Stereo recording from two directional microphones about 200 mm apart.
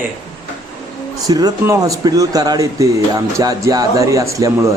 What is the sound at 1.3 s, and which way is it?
Speech, 20° right (ahead or behind).